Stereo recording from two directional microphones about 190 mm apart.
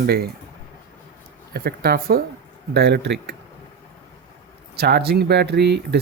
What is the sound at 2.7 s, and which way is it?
Speech, 60° right (ahead or behind).